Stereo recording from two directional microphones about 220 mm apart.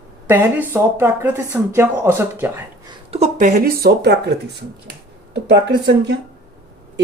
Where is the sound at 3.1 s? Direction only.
30° right (ahead or behind).